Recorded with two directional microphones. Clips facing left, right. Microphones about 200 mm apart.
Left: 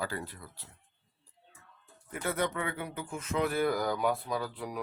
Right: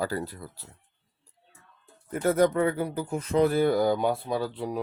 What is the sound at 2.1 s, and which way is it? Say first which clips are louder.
Speech: right 10 dB; 40° right (ahead or behind).